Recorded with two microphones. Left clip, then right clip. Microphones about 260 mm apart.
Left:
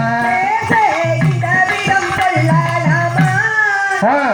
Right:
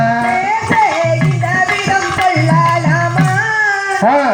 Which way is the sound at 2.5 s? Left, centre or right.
Right.